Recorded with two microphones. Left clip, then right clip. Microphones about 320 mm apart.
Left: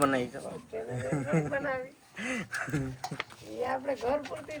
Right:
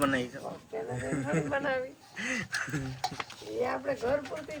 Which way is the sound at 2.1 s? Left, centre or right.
Centre.